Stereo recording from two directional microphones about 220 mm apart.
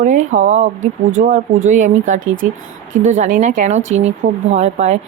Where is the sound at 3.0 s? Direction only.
35° right (ahead or behind).